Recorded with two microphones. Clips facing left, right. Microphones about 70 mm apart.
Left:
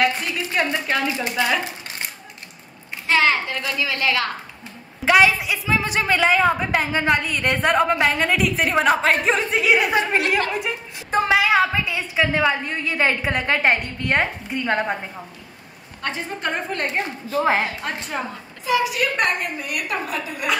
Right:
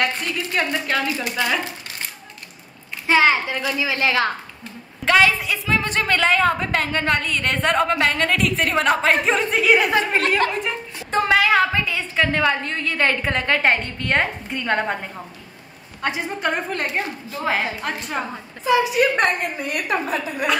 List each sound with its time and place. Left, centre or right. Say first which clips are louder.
0.0 s a woman's voice: left 2 dB; centre
3.1 s a child's voice: right 2 dB; centre
5.0 s a woman's voice: left 1 dB; centre
16.0 s speech: right 3 dB; centre
17.0 s a woman's voice: left 4 dB; left
18.1 s speech: right 1 dB; centre
18.7 s a woman's voice: right 3 dB; right